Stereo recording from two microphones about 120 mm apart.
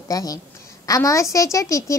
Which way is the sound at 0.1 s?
30° left (ahead or behind).